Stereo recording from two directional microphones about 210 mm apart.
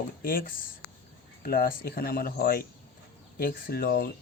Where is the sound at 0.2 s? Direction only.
45° left (ahead or behind).